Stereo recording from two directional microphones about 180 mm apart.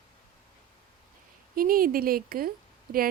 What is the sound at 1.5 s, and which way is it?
Speech, 55° right (ahead or behind).